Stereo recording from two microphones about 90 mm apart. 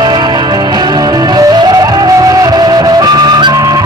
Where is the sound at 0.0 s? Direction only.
50° right (ahead or behind).